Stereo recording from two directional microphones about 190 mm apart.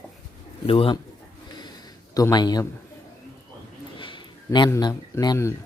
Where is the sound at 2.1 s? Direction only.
20° left (ahead or behind).